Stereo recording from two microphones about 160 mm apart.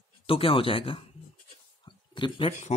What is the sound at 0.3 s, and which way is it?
Speech, 35° left (ahead or behind).